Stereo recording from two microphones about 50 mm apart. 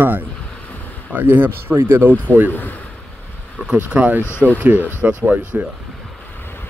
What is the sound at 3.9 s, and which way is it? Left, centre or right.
Speech, right.